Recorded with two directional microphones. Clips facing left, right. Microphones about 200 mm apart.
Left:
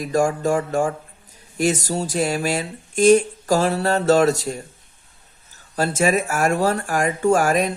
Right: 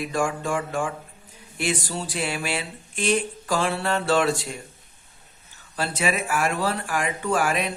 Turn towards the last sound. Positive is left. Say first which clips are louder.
# left 7 dB
turn(degrees=45)  # may be behind; listen again after turning